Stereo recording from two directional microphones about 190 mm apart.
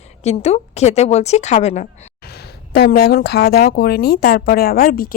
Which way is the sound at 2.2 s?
55° left (ahead or behind).